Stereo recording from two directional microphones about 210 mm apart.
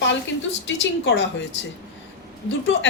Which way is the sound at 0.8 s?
60° left (ahead or behind).